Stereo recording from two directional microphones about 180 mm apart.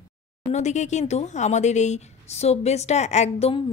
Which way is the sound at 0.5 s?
40° left (ahead or behind).